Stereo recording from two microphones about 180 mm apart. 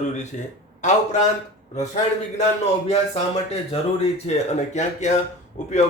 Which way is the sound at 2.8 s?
35° left (ahead or behind).